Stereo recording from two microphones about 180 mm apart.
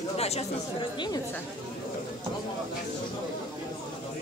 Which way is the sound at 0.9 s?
25° left (ahead or behind).